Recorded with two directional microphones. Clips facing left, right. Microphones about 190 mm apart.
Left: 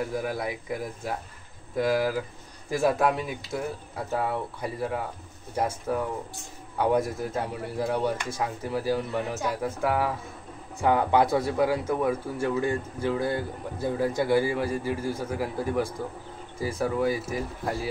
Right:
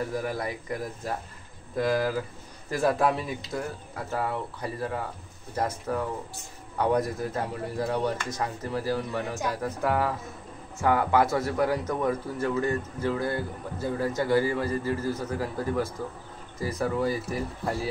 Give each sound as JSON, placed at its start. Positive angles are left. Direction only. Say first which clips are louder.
{"t": 0.0, "sound": "speech", "louder": "left 1 dB", "side_deg": 10}
{"t": 4.1, "sound": "speech", "louder": "left 2 dB", "side_deg": 15}
{"t": 10.8, "sound": "speech", "louder": "left 1 dB", "side_deg": 20}